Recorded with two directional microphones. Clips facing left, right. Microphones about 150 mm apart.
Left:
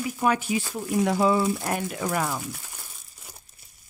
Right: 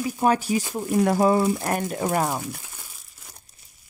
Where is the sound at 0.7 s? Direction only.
50° right (ahead or behind).